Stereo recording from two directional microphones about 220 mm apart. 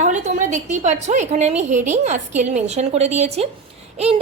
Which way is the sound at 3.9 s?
30° right (ahead or behind).